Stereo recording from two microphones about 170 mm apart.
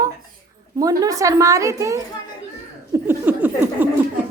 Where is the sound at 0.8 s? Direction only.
20° right (ahead or behind).